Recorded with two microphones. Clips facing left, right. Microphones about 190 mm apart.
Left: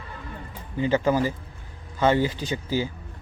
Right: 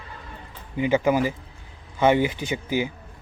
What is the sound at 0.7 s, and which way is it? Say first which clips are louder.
Speech: right 1 dB; 15° right (ahead or behind).